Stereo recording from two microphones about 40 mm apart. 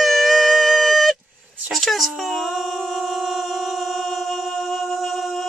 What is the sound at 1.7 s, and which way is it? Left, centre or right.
Humming, centre.